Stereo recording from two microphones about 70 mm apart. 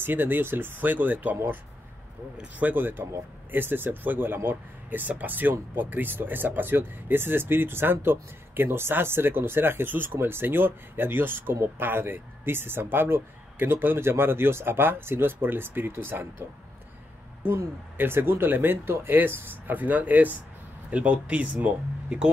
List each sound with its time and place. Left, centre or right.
0.0 s speech: right
2.6 s speech: right